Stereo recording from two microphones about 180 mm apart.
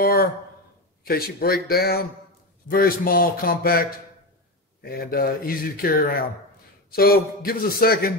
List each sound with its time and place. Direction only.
0.0 s speech: 55° left (ahead or behind)
4.8 s speech: 60° left (ahead or behind)